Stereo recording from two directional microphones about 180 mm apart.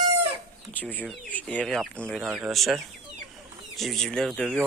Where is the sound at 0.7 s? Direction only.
5° left (ahead or behind).